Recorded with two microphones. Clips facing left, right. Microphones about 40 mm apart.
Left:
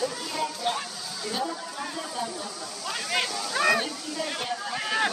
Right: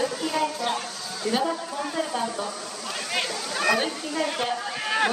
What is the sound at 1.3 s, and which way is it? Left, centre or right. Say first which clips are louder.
Speech: right 6 dB; right.